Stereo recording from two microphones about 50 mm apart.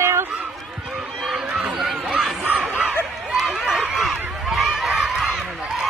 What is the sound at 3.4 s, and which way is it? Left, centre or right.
Run, centre.